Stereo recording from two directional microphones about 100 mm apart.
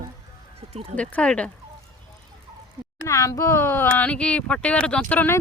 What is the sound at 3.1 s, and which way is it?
Speech, 35° left (ahead or behind).